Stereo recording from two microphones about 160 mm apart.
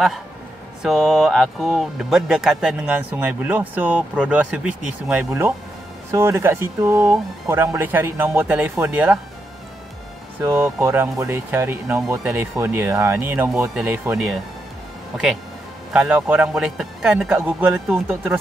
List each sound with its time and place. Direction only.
0.8 s speech: centre (ahead or behind)
10.4 s speech: 15° right (ahead or behind)
14.1 s speech: 5° right (ahead or behind)
15.9 s speech: 5° right (ahead or behind)